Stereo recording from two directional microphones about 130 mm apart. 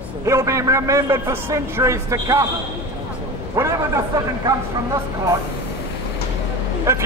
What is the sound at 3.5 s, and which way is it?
A man's voice, 25° right (ahead or behind).